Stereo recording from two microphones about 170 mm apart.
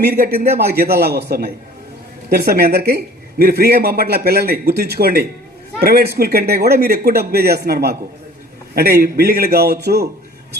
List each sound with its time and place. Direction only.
0.0 s speech: 65° right (ahead or behind)